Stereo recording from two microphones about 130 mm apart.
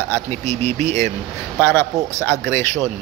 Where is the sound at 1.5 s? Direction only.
20° left (ahead or behind).